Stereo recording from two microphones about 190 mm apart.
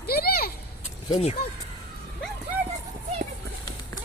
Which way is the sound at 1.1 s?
35° left (ahead or behind).